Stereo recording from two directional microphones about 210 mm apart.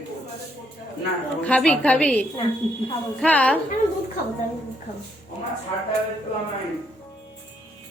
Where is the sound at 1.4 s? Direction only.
5° left (ahead or behind).